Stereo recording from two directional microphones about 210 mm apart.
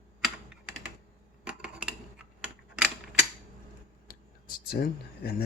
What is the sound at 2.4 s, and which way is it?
Typewriter, 5° right (ahead or behind).